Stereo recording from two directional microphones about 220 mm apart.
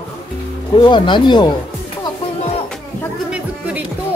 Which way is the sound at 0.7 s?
20° left (ahead or behind).